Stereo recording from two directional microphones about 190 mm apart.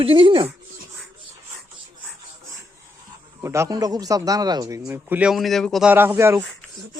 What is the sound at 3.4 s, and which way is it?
Speech, 15° right (ahead or behind).